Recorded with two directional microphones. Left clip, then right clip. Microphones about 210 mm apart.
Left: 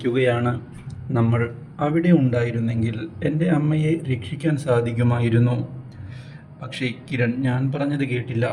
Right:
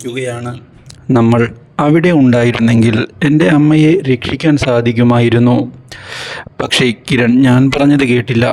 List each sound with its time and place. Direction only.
0.0 s speech: centre (ahead or behind)
1.1 s speech: 55° right (ahead or behind)